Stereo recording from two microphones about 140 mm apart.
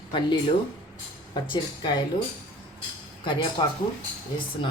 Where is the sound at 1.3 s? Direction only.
35° left (ahead or behind).